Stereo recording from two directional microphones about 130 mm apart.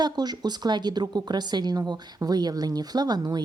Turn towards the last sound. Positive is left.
turn(degrees=-30)  # may be behind; listen again after turning